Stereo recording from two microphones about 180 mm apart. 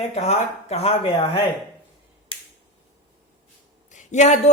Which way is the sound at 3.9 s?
40° left (ahead or behind).